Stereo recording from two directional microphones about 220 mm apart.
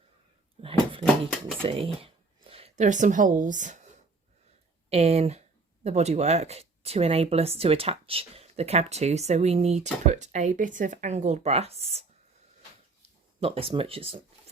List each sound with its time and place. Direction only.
0.6 s a sound: 25° right (ahead or behind)
1.0 s speech: centre (ahead or behind)
1.6 s speech: 25° right (ahead or behind)
4.9 s speech: 30° right (ahead or behind)
13.4 s speech: 25° right (ahead or behind)